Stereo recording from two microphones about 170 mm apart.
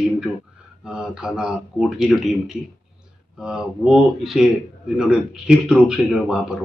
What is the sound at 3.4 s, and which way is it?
Speech, 5° right (ahead or behind).